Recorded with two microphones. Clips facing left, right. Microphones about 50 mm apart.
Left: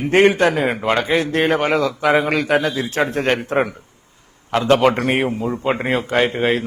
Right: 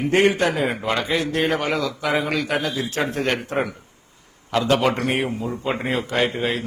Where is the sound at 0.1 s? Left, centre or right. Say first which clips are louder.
Left 5 dB; left.